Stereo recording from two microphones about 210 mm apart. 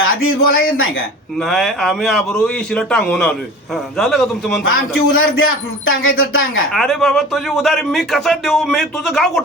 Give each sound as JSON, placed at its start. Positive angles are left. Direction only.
{"t": 0.0, "sound": "a man's voice", "side_deg": 75}
{"t": 1.4, "sound": "speech", "side_deg": 0}
{"t": 5.0, "sound": "a man's voice", "side_deg": 75}
{"t": 6.7, "sound": "speech", "side_deg": 0}